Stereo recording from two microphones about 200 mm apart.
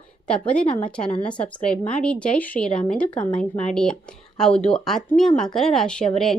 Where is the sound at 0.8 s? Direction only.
30° left (ahead or behind).